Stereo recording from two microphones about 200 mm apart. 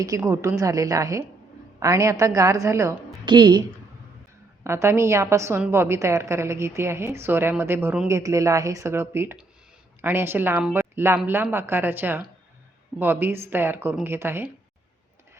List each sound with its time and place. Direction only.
0.2 s a woman's voice: 15° right (ahead or behind)
4.6 s a woman's voice: 15° right (ahead or behind)